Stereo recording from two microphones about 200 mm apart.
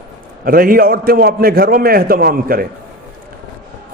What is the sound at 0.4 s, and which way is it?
A man's voice, 45° right (ahead or behind).